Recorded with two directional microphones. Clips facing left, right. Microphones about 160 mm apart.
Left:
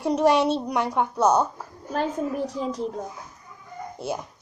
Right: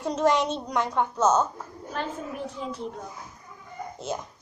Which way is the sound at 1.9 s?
40° left (ahead or behind).